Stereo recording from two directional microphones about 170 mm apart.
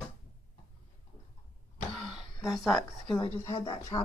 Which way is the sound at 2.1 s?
Centre (ahead or behind).